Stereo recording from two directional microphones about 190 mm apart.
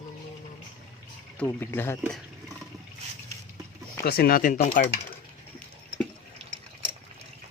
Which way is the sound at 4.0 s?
55° left (ahead or behind).